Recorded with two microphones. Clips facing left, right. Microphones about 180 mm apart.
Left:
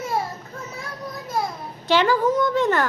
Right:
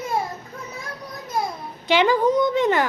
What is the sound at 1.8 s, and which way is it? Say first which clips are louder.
A woman's voice: right 1 dB; 15° right (ahead or behind).